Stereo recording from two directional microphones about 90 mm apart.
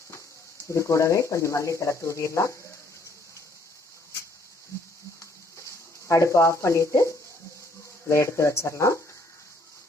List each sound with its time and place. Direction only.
0.7 s speech: 35° left (ahead or behind)
5.2 s a sound: 35° left (ahead or behind)
8.0 s speech: 30° left (ahead or behind)